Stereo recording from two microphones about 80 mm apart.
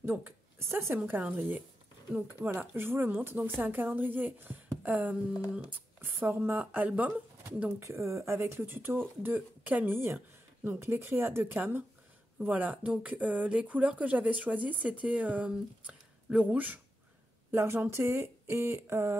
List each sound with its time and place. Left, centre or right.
0.0 s a woman's voice: right
7.8 s speech: right
17.5 s speech: right